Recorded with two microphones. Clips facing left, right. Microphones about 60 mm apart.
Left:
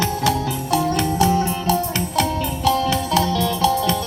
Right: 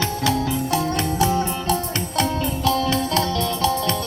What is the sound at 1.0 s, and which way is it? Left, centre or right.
Music, right.